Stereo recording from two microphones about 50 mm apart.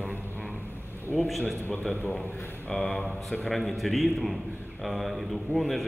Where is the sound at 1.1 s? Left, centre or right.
Centre.